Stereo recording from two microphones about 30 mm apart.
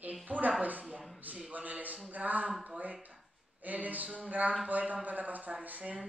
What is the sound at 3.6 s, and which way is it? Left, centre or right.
Speech, right.